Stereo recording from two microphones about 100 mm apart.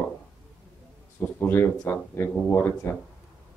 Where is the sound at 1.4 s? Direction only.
25° left (ahead or behind).